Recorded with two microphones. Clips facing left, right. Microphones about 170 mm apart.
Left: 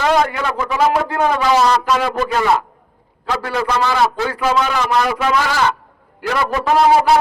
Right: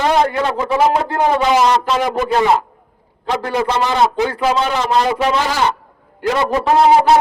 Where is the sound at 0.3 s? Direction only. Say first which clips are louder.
Right 3 dB; 30° right (ahead or behind).